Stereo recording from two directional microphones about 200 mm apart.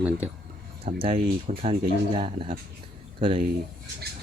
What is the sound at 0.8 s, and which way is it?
Speech, 35° right (ahead or behind).